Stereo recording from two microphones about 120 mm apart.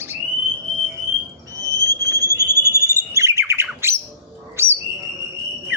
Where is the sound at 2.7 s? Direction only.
25° right (ahead or behind).